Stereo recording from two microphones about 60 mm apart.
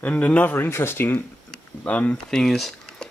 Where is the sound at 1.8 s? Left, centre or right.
Left.